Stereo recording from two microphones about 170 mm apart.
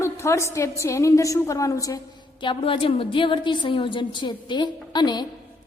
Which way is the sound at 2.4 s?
30° left (ahead or behind).